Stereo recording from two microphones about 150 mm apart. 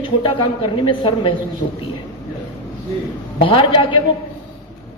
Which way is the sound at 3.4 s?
35° left (ahead or behind).